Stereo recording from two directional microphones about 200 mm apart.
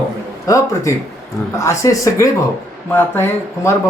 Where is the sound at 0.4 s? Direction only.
15° left (ahead or behind).